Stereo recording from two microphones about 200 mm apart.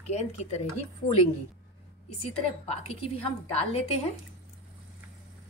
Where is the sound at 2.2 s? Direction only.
30° left (ahead or behind).